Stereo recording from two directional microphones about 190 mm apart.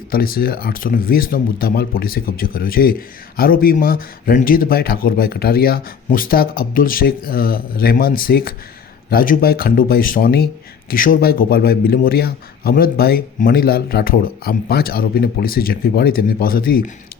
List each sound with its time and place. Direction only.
0.1 s speech: 50° left (ahead or behind)